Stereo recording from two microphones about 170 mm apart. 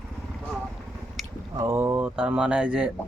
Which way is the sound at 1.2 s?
Centre (ahead or behind).